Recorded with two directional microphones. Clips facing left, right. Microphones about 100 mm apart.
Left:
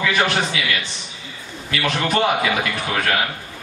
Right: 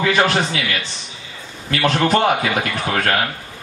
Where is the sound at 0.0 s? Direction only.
40° right (ahead or behind).